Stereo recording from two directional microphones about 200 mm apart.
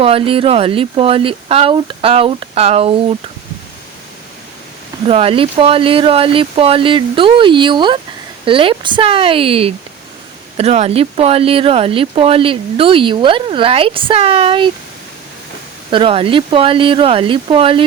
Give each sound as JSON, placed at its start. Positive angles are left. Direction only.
{"t": 0.0, "sound": "speech", "side_deg": -30}
{"t": 5.0, "sound": "speech", "side_deg": -30}
{"t": 15.9, "sound": "speech", "side_deg": -25}